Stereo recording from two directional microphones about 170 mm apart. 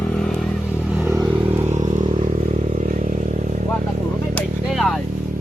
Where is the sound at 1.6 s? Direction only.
40° right (ahead or behind).